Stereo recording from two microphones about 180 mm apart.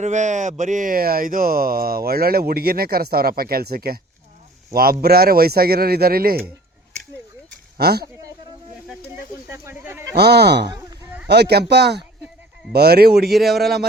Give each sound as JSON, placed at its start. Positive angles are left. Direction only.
{"t": 0.0, "sound": "speech", "side_deg": -40}
{"t": 7.8, "sound": "speech", "side_deg": -60}
{"t": 9.5, "sound": "a sound", "side_deg": -15}
{"t": 10.2, "sound": "speech", "side_deg": -65}
{"t": 10.7, "sound": "a sound", "side_deg": -10}
{"t": 11.3, "sound": "speech", "side_deg": -65}
{"t": 13.3, "sound": "speech", "side_deg": 0}